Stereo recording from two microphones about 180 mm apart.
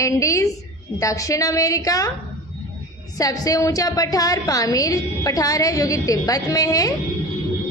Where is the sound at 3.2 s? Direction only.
20° left (ahead or behind).